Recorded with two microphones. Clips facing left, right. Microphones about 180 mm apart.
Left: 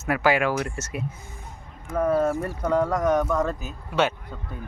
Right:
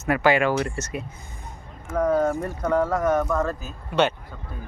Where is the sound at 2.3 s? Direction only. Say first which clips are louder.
Even; 20° right (ahead or behind).